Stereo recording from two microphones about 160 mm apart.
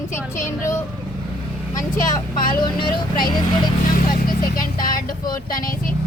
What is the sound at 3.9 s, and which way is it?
Vehicle, 65° left (ahead or behind).